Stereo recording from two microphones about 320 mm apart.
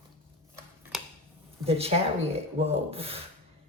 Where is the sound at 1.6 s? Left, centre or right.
Centre.